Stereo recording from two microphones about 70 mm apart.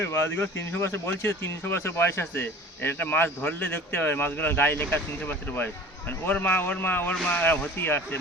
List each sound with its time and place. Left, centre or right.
0.0 s speech: left